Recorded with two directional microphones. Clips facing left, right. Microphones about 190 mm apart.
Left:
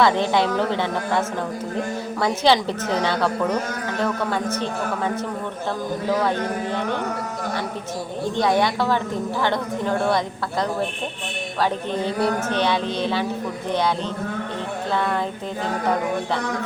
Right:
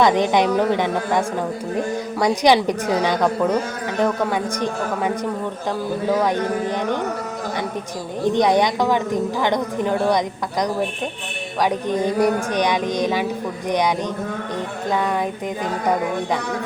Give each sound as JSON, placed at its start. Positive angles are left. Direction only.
{"t": 0.0, "sound": "a woman's voice", "side_deg": -15}
{"t": 2.2, "sound": "a woman's voice", "side_deg": -15}
{"t": 8.2, "sound": "a woman's voice", "side_deg": -20}
{"t": 14.9, "sound": "a woman's voice", "side_deg": -15}